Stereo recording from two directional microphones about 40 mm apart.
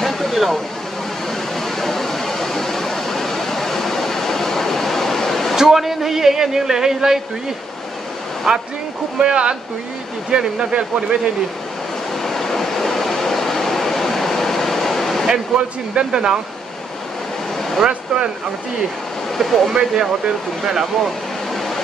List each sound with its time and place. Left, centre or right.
0.0 s a sound: centre
1.6 s a sound: centre
5.6 s speech: centre
9.2 s speech: right
12.2 s vehicle: centre
15.5 s speech: right
17.8 s speech: right
19.3 s speech: centre
19.7 s speech: centre